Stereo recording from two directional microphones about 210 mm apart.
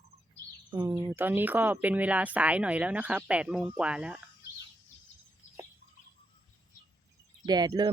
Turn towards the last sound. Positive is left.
turn(degrees=-20)  # may be behind; listen again after turning